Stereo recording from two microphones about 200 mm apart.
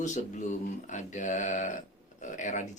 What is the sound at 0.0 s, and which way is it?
Speech, 35° left (ahead or behind).